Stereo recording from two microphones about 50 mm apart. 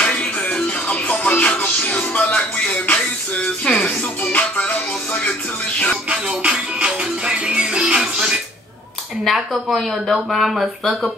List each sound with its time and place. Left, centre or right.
0.0 s music: left
3.6 s music: centre
4.3 s music: left
6.0 s music: right
9.2 s speech: centre